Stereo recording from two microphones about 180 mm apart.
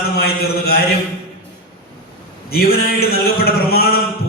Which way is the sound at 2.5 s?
60° left (ahead or behind).